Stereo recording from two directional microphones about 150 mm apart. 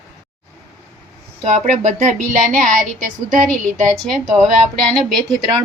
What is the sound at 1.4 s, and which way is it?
A woman's voice, 55° right (ahead or behind).